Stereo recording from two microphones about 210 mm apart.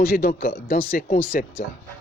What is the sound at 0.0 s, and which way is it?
Speech, 45° left (ahead or behind).